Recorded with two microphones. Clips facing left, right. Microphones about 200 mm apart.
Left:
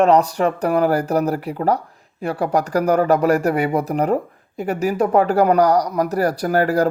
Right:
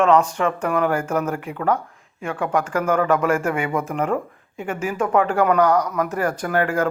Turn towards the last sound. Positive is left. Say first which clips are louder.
# left 4 dB
turn(degrees=35)  # may be behind; listen again after turning